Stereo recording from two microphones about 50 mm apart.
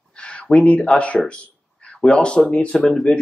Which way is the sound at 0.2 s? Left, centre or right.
Left.